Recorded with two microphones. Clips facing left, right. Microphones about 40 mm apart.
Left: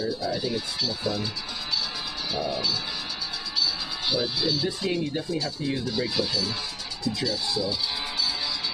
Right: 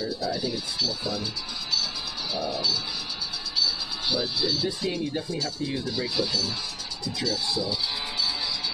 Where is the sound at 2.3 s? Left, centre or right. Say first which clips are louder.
Even; left.